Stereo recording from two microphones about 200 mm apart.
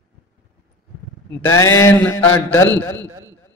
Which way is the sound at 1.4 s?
15° left (ahead or behind).